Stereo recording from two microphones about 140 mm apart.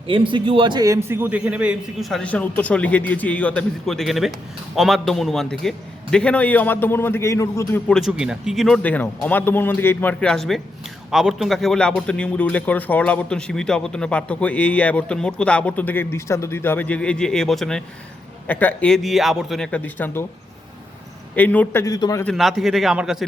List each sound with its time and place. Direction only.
0.1 s a man's voice: 35° right (ahead or behind); by 7.8 s 20° left (ahead or behind)
7.9 s a man's voice: 5° left (ahead or behind)
21.3 s a man's voice: 10° left (ahead or behind)
21.9 s a man's voice: 30° left (ahead or behind)
22.2 s a man's voice: centre (ahead or behind)